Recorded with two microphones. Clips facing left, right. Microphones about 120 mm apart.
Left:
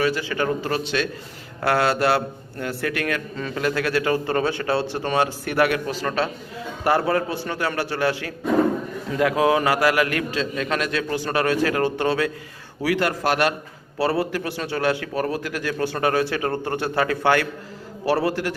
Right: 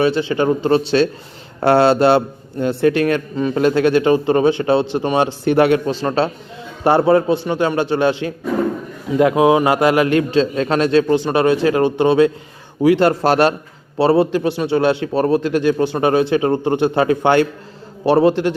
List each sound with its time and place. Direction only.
0.0 s a man's voice: 25° right (ahead or behind)